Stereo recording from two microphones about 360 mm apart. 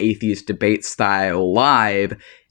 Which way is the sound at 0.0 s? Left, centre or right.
Right.